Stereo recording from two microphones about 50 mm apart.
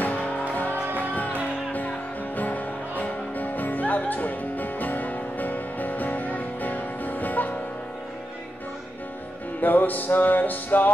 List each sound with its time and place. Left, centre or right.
0.0 s music: left
9.6 s music: left